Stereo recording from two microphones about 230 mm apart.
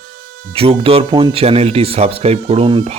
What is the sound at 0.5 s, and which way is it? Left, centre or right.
Speech, right.